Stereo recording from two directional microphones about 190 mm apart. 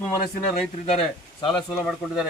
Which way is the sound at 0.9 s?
25° left (ahead or behind).